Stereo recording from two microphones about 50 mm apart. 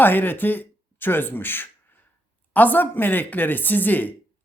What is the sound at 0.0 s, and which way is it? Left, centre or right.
Speech, left.